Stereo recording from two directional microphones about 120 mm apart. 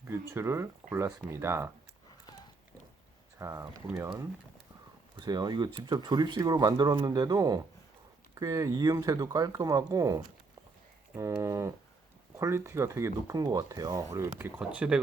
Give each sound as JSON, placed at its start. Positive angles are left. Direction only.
{"t": 0.0, "sound": "speech", "side_deg": -20}
{"t": 3.3, "sound": "speech", "side_deg": -25}
{"t": 5.2, "sound": "speech", "side_deg": -35}
{"t": 14.3, "sound": "speech", "side_deg": -15}